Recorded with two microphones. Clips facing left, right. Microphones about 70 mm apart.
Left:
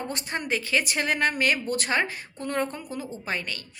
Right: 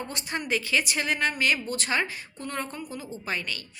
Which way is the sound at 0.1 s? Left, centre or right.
Left.